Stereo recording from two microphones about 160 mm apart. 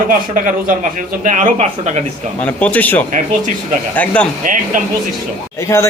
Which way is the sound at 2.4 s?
10° left (ahead or behind).